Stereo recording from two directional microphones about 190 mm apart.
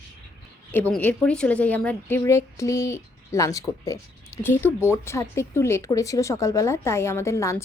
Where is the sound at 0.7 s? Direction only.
10° left (ahead or behind).